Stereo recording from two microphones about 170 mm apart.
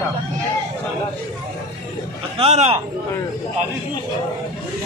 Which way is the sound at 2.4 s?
35° right (ahead or behind).